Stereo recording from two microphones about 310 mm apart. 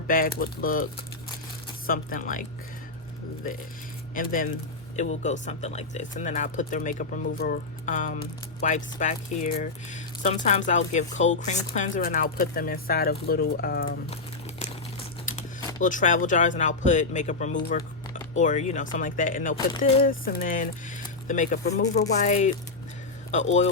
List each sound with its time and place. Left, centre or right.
0.1 s speech: left
4.1 s speech: left